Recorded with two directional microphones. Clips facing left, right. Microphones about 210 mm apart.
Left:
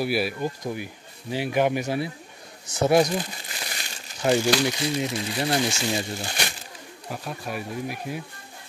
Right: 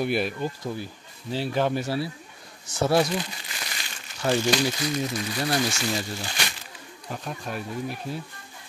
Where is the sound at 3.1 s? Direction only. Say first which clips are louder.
Left 1 dB; 40° left (ahead or behind).